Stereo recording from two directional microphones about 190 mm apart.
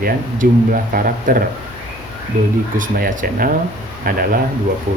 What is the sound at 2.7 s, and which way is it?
Speech, 45° right (ahead or behind).